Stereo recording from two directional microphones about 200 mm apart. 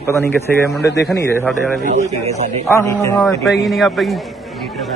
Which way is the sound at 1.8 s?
35° right (ahead or behind).